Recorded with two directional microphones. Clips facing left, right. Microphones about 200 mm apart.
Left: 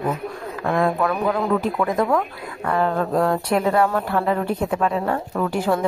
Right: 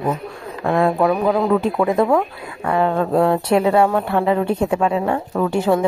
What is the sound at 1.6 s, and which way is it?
A woman's voice, 30° right (ahead or behind).